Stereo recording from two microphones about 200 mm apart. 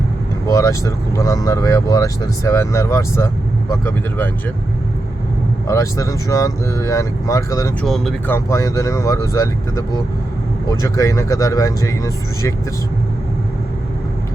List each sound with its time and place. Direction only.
0.4 s speech: 15° left (ahead or behind)
5.6 s speech: 15° left (ahead or behind)
7.9 s speech: centre (ahead or behind)
8.4 s speech: 15° left (ahead or behind)